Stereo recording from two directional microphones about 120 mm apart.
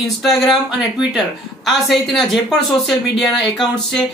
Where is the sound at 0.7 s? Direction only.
5° right (ahead or behind).